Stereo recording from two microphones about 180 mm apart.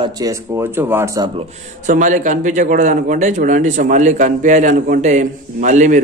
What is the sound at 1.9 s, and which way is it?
A man's voice, 45° right (ahead or behind).